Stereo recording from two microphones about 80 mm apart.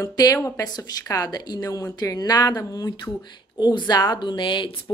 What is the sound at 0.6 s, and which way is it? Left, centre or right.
A woman's voice, left.